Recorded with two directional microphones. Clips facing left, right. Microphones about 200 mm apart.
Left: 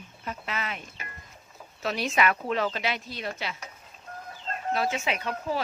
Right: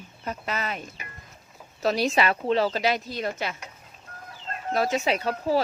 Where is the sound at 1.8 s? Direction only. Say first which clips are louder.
Right 3 dB; 35° right (ahead or behind).